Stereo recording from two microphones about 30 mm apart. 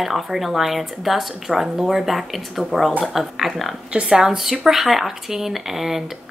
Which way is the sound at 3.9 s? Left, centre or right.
Right.